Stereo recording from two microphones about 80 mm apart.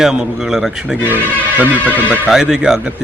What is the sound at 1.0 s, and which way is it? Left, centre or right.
Speech, right.